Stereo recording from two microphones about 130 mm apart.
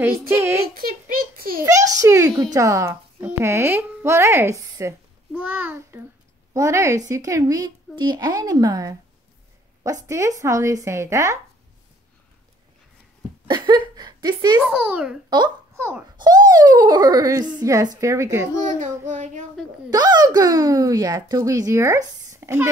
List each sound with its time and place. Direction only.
0.3 s speech: 20° right (ahead or behind)
1.0 s a sound: 90° right
1.7 s a child's voice: 25° right (ahead or behind)
13.5 s speech: 35° right (ahead or behind)
14.6 s a child's voice: 5° right (ahead or behind)
15.2 s a child's voice: 35° right (ahead or behind)
15.7 s a child's voice: 20° right (ahead or behind)
16.2 s speech: 30° right (ahead or behind)
18.8 s child singing: 65° right (ahead or behind)
19.9 s speech: 30° right (ahead or behind)